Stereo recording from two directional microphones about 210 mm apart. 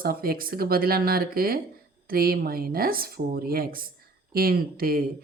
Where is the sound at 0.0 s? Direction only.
45° right (ahead or behind).